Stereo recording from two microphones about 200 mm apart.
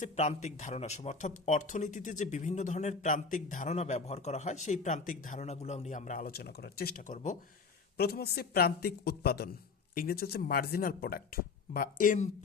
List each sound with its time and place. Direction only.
0.0 s speech: 35° left (ahead or behind)
7.9 s speech: 50° left (ahead or behind)